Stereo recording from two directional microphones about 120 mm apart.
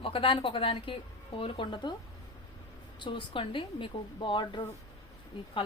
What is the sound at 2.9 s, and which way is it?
A woman's voice, 45° left (ahead or behind).